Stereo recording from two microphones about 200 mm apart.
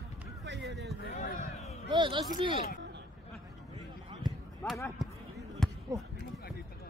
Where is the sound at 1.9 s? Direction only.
25° right (ahead or behind).